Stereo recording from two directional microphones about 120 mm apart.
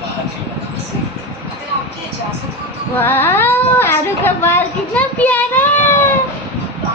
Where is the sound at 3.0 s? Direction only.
20° left (ahead or behind).